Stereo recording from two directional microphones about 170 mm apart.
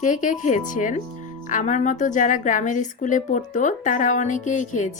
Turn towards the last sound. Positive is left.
turn(degrees=45)  # may be behind; listen again after turning